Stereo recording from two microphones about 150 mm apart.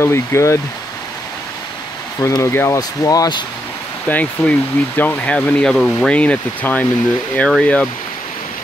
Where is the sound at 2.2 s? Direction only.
20° left (ahead or behind).